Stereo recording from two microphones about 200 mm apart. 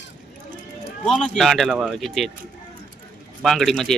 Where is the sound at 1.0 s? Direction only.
5° left (ahead or behind).